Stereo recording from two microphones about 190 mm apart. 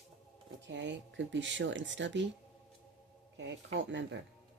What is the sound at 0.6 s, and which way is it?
Speech, 70° right (ahead or behind).